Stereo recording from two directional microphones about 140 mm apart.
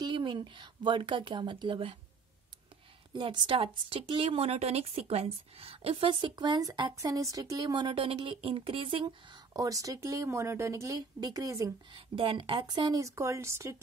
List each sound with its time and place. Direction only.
0.0 s speech: 35° right (ahead or behind)
3.1 s speech: 35° right (ahead or behind)
11.9 s speech: 40° right (ahead or behind); by 13.7 s 20° right (ahead or behind)